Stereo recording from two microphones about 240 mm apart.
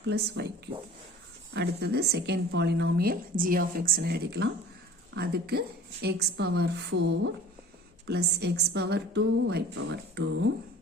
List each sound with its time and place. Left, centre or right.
0.1 s a woman's voice: right